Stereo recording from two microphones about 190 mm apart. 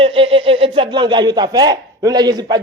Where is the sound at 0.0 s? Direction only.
30° right (ahead or behind).